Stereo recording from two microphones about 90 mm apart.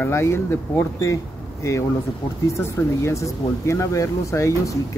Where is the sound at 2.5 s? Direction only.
30° left (ahead or behind).